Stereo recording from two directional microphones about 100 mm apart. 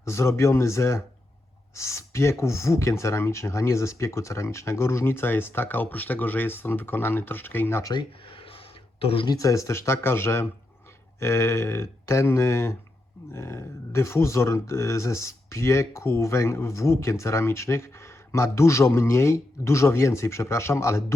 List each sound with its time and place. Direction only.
0.0 s speech: 30° left (ahead or behind)
9.0 s speech: 70° left (ahead or behind)
9.2 s speech: 35° left (ahead or behind)